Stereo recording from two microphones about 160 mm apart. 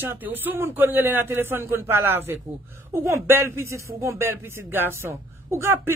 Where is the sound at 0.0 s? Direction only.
10° right (ahead or behind).